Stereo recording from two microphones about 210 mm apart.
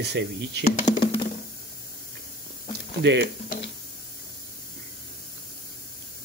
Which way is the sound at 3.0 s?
55° right (ahead or behind).